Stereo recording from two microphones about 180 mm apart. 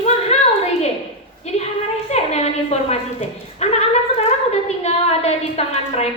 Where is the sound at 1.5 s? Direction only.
35° left (ahead or behind).